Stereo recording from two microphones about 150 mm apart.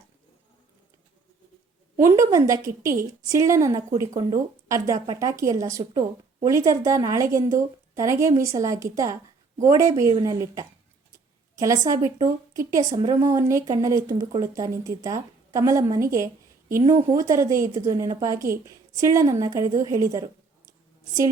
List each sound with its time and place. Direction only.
2.0 s speech: 20° right (ahead or behind)